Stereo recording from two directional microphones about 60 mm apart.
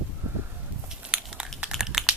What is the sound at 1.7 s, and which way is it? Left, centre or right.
Typing, centre.